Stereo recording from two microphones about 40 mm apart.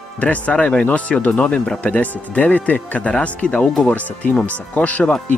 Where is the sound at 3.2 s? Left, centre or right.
Left.